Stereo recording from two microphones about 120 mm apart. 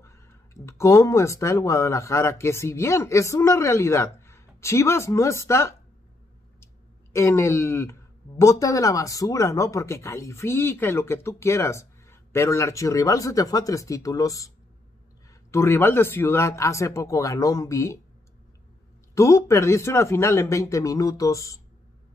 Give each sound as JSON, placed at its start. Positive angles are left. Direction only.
{"t": 0.0, "sound": "speech", "side_deg": 20}
{"t": 6.6, "sound": "clicking", "side_deg": 20}
{"t": 8.4, "sound": "speech", "side_deg": 25}
{"t": 19.1, "sound": "speech", "side_deg": 25}